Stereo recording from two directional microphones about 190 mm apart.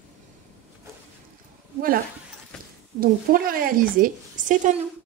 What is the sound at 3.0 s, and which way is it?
A woman's voice, 50° right (ahead or behind).